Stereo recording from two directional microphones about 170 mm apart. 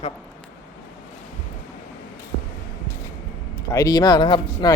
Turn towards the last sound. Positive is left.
turn(degrees=25)  # may be behind; listen again after turning